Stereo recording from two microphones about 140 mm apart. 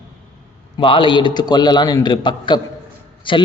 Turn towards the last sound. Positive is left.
turn(degrees=35)  # may be behind; listen again after turning